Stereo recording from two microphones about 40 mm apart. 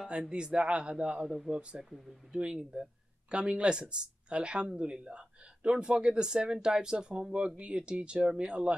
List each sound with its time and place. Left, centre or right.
0.1 s speech: right
1.2 s speech: centre
1.6 s speech: right